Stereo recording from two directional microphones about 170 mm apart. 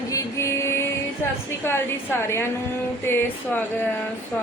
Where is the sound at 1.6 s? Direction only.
15° left (ahead or behind).